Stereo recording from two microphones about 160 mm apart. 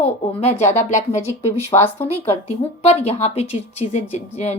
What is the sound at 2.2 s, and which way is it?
Speech, 40° left (ahead or behind).